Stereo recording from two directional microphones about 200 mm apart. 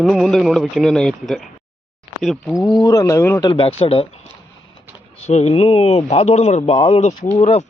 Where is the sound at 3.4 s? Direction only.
25° left (ahead or behind).